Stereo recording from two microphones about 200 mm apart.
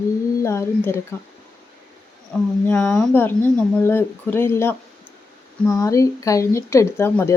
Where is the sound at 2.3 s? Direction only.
5° left (ahead or behind).